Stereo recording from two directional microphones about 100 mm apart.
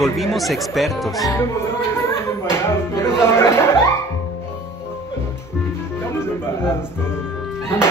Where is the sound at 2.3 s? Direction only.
25° left (ahead or behind).